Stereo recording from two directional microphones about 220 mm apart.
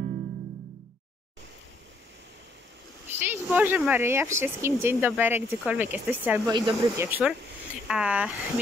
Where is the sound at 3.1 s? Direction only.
10° right (ahead or behind).